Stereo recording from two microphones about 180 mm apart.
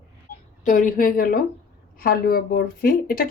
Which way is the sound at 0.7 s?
45° left (ahead or behind).